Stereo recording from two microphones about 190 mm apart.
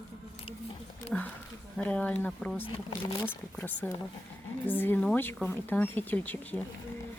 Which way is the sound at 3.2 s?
10° left (ahead or behind).